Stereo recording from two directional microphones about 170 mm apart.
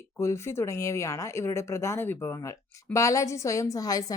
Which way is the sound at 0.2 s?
15° left (ahead or behind).